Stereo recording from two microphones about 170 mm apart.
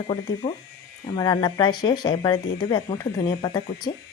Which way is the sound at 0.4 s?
40° left (ahead or behind).